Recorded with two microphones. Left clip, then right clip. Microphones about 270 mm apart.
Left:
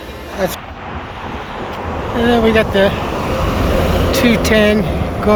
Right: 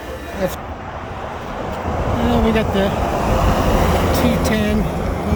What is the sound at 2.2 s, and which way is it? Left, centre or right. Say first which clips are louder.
Speech: left 7 dB; centre.